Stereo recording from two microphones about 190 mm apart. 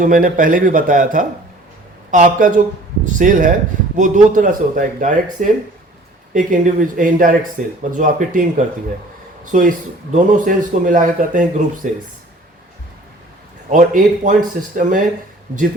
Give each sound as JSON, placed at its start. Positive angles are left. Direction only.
{"t": 0.0, "sound": "a man's voice", "side_deg": -45}
{"t": 13.7, "sound": "a man's voice", "side_deg": -40}